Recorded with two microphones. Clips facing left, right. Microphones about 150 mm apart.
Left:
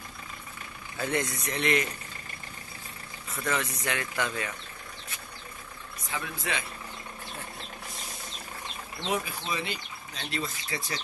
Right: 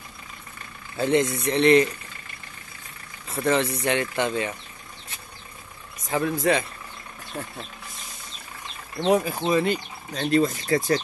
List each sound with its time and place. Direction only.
0.9 s speech: 25° right (ahead or behind)
3.3 s speech: 30° right (ahead or behind)
6.0 s speech: 40° right (ahead or behind)
9.0 s speech: 40° right (ahead or behind)